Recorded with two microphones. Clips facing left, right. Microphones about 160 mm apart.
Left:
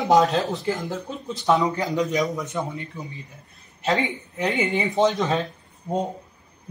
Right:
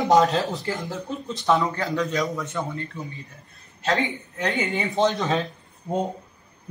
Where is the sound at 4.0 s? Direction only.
10° left (ahead or behind).